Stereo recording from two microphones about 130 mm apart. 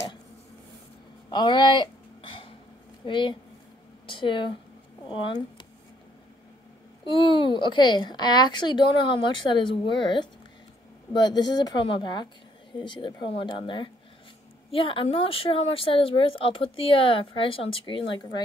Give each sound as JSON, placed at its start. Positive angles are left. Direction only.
{"t": 1.3, "sound": "a sound", "side_deg": 35}
{"t": 3.1, "sound": "speech", "side_deg": 40}
{"t": 7.1, "sound": "speech", "side_deg": 40}